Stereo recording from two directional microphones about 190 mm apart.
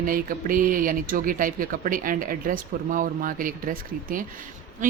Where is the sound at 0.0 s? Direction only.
45° right (ahead or behind).